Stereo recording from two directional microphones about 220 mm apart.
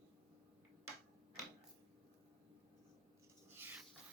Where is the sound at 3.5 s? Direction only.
10° right (ahead or behind).